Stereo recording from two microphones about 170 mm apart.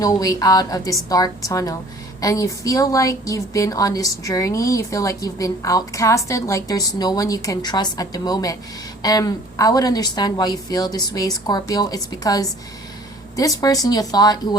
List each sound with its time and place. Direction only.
0.0 s a woman's voice: 20° left (ahead or behind)